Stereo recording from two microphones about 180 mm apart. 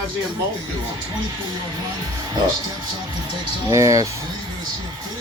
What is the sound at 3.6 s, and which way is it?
Speech, 20° right (ahead or behind).